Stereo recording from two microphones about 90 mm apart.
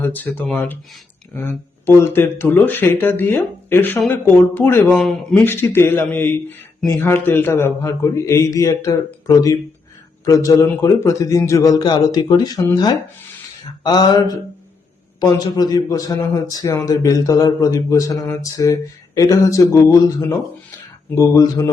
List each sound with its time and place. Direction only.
0.0 s speech: 20° left (ahead or behind)
4.9 s speech: centre (ahead or behind)
5.4 s a man's voice: 25° left (ahead or behind); by 21.7 s 40° left (ahead or behind)